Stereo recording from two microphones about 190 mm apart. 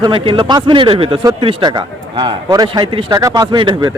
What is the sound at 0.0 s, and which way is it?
Speech, 25° right (ahead or behind).